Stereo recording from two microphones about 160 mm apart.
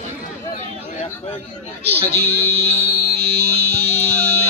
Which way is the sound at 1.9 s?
35° right (ahead or behind).